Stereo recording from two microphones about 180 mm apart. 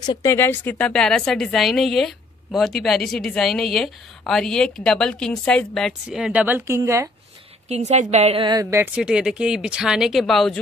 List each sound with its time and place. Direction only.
0.0 s speech: 20° left (ahead or behind); by 7.1 s 15° right (ahead or behind)
7.6 s a woman's voice: 40° right (ahead or behind); by 8.9 s 15° right (ahead or behind)
8.9 s speech: 5° right (ahead or behind)